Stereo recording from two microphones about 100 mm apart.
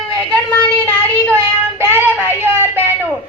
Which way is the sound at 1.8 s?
20° right (ahead or behind).